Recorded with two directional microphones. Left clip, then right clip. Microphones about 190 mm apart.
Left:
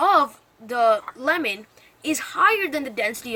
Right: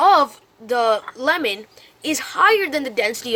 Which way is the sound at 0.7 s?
45° right (ahead or behind).